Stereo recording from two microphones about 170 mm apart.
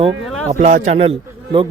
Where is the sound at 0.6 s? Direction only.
45° right (ahead or behind).